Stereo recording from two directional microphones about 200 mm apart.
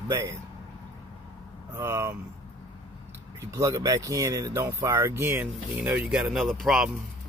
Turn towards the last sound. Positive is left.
turn(degrees=0)  # may be behind; listen again after turning